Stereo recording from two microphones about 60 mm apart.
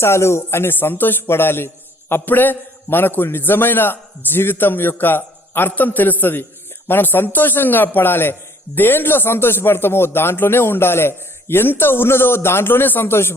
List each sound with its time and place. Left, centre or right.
0.0 s a man's voice: left